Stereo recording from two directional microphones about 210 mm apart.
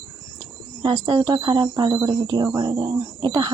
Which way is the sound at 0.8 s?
20° right (ahead or behind).